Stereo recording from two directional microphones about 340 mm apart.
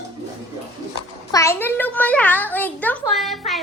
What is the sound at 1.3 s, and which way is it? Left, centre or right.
A child's voice, centre.